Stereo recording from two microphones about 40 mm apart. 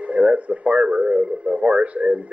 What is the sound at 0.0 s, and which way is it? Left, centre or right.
Radio, right.